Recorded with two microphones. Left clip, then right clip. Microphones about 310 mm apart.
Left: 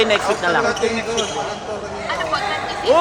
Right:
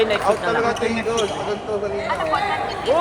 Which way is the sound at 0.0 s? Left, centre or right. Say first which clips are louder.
Left 2 dB; left.